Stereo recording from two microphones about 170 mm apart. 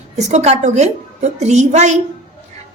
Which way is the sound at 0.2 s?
40° right (ahead or behind).